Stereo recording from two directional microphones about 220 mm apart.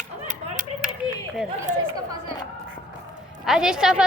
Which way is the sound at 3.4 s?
5° right (ahead or behind).